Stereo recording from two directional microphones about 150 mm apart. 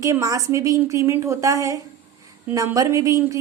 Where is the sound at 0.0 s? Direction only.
20° right (ahead or behind).